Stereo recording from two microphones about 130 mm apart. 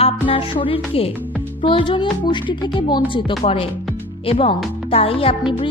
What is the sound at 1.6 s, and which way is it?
A woman's voice, 40° left (ahead or behind).